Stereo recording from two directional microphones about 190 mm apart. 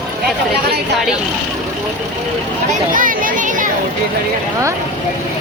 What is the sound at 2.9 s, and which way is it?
Children playing, 45° right (ahead or behind).